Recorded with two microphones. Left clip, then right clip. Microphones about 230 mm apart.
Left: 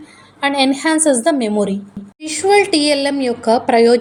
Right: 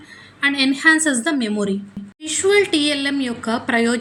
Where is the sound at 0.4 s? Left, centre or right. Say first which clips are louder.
Even; centre.